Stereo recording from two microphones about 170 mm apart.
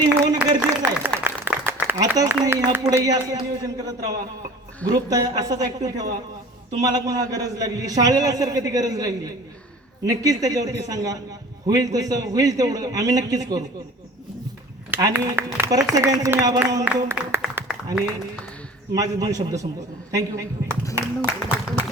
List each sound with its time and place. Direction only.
0.1 s a sound: 10° right (ahead or behind)
2.4 s a man's voice: 15° right (ahead or behind)
14.8 s speech: 10° right (ahead or behind)
18.9 s a man's voice: 20° right (ahead or behind)